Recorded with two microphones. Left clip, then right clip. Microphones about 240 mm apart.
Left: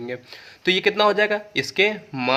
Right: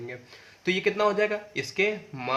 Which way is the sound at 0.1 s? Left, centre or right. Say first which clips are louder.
Left 9 dB; left.